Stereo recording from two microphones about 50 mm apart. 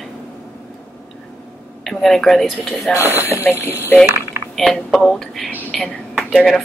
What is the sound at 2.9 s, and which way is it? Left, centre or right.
Speech, left.